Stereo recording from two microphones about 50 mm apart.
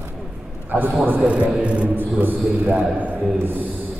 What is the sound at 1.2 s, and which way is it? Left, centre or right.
Speech, right.